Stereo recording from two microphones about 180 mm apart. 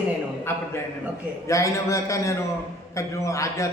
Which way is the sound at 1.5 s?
15° left (ahead or behind).